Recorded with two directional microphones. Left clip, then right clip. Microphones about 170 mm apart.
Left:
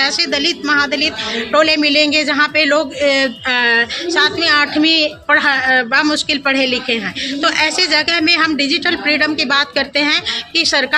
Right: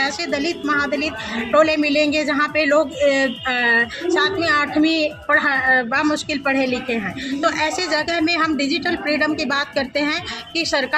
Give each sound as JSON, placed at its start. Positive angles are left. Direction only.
{"t": 0.0, "sound": "speech", "side_deg": 25}
{"t": 1.5, "sound": "a man's voice", "side_deg": 30}
{"t": 4.9, "sound": "a woman's voice", "side_deg": 5}
{"t": 5.3, "sound": "a man's voice", "side_deg": 30}